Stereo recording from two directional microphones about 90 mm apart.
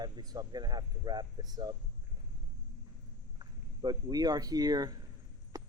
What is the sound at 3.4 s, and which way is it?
Speech, 45° right (ahead or behind).